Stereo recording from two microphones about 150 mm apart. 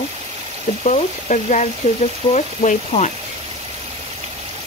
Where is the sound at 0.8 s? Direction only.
55° left (ahead or behind).